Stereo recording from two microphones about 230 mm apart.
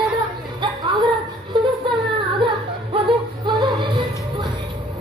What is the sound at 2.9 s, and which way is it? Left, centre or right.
Music, centre.